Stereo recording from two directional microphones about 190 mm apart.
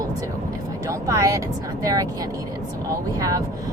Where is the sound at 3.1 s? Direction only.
20° right (ahead or behind).